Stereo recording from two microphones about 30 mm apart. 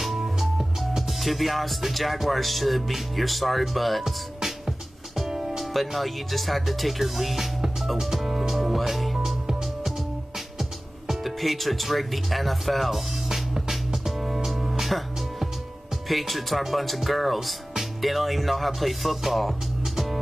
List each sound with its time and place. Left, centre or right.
0.2 s music: centre
1.8 s speech: centre
4.0 s music: centre
5.3 s music: centre
5.6 s speech: centre
7.8 s music: centre
10.6 s speech: centre
13.3 s music: centre
16.1 s speech: centre